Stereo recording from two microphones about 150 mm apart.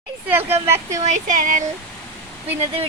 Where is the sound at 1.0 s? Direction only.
55° right (ahead or behind).